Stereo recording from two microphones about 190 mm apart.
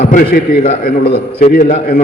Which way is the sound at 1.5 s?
55° left (ahead or behind).